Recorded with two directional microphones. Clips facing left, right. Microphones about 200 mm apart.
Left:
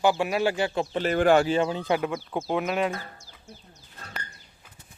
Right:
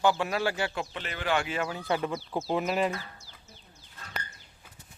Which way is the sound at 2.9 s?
50° left (ahead or behind).